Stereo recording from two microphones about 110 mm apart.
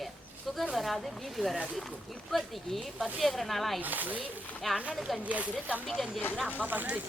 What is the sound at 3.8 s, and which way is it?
Speech, 15° right (ahead or behind).